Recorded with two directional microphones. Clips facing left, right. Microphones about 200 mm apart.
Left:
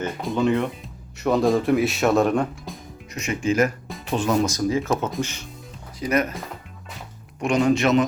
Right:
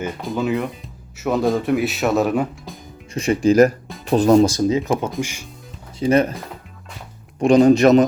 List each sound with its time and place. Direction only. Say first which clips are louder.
0.0 s speech: left 1 dB; centre (ahead or behind)
3.2 s speech: right 8 dB; 35° right (ahead or behind)
5.2 s speech: right 1 dB; 10° right (ahead or behind)
6.0 s speech: right 6 dB; 30° right (ahead or behind)
7.3 s speech: right 7 dB; 35° right (ahead or behind)